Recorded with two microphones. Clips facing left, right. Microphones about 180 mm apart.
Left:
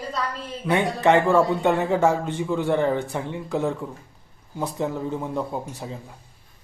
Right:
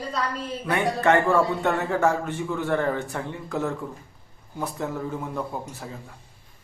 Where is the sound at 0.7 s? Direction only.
20° left (ahead or behind).